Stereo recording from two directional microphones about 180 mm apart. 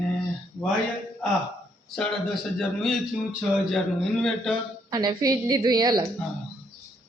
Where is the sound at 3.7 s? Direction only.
Centre (ahead or behind).